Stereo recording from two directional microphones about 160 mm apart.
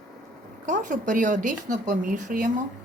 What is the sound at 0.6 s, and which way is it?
Speech, 50° right (ahead or behind).